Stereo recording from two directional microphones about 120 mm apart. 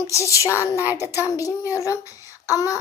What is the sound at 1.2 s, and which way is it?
Child singing, 25° left (ahead or behind).